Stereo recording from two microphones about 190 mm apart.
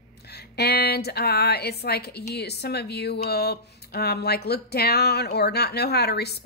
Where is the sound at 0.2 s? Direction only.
60° left (ahead or behind).